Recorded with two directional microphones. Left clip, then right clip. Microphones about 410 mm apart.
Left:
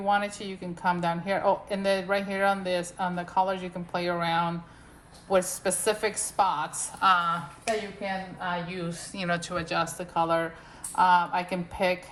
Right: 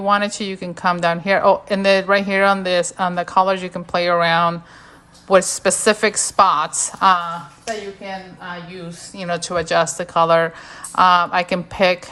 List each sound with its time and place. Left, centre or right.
0.1 s a woman's voice: right